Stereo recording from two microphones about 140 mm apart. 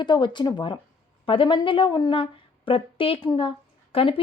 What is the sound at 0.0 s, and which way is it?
A woman's voice, 35° left (ahead or behind).